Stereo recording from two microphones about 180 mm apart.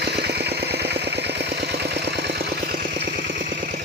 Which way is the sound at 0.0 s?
65° right (ahead or behind).